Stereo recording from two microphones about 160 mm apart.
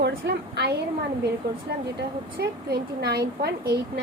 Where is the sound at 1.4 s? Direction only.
90° right.